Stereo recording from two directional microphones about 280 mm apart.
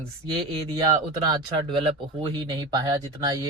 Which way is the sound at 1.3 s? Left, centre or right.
Centre.